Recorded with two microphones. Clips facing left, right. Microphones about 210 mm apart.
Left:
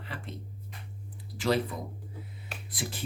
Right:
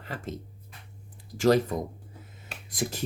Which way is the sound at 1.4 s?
45° right (ahead or behind).